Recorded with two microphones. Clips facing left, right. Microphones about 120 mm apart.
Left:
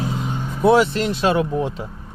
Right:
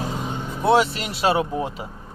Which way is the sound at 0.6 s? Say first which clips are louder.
Left 4 dB; centre (ahead or behind).